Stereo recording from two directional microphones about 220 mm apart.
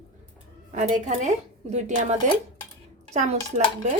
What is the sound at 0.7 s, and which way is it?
A woman's voice, 35° right (ahead or behind).